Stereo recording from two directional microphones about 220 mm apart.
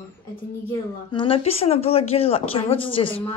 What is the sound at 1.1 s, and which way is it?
A child's voice, 25° left (ahead or behind).